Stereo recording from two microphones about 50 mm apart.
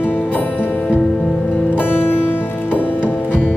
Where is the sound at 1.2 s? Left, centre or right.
Left.